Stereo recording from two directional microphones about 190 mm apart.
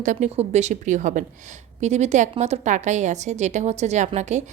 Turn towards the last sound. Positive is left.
turn(degrees=-40)  # may be behind; listen again after turning